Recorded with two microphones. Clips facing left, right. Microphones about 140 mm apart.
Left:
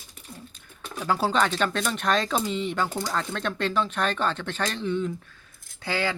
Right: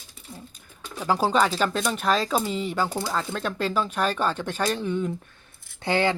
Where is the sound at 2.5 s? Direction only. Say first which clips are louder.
Even; 35° right (ahead or behind).